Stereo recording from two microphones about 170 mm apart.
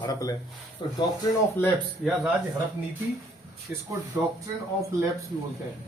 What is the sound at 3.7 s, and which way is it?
Speech, 10° right (ahead or behind).